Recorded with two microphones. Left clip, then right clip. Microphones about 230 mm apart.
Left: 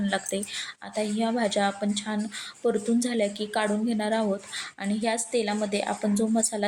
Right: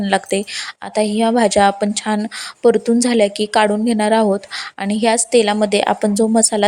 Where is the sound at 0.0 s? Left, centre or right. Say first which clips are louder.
Right 12 dB; right.